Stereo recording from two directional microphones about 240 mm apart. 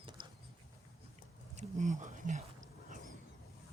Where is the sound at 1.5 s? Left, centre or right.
Right.